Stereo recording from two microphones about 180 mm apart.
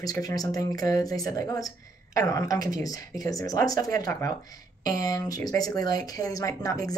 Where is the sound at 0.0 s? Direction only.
20° left (ahead or behind).